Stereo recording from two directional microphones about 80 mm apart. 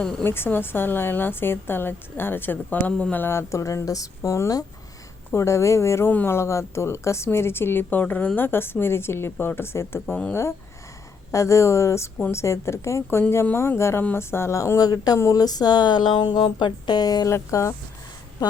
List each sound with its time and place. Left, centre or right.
0.0 s speech: centre
0.3 s a woman's voice: left
11.3 s a woman's voice: left
17.2 s a woman's voice: left